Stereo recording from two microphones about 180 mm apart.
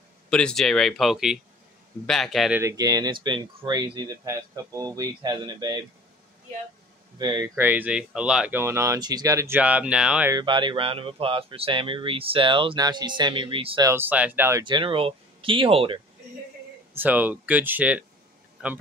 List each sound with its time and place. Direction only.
0.3 s speech: 5° left (ahead or behind)
2.6 s speech: 20° right (ahead or behind)
7.2 s speech: 25° right (ahead or behind); by 10.3 s 5° right (ahead or behind)
10.3 s speech: 25° right (ahead or behind)
13.8 s speech: 10° right (ahead or behind)
14.6 s speech: 25° right (ahead or behind)
16.9 s speech: 10° right (ahead or behind)